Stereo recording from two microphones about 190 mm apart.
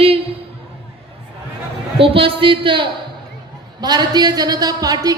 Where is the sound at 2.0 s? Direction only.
30° right (ahead or behind).